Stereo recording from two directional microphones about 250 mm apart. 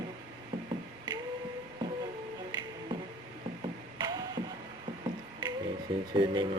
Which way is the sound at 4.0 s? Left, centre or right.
Centre.